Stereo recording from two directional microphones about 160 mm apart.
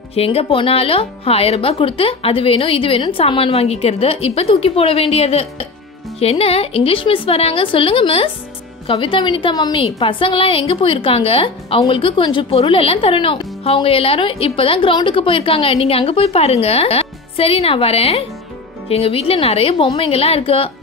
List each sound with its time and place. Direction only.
0.1 s speech: 40° left (ahead or behind)
9.8 s speech: 35° left (ahead or behind)